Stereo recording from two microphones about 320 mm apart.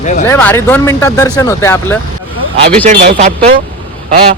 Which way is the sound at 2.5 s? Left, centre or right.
Right.